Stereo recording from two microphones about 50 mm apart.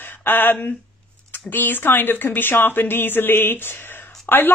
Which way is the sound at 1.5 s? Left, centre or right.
Left.